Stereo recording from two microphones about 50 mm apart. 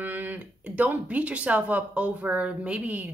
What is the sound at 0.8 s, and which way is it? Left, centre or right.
Speech, right.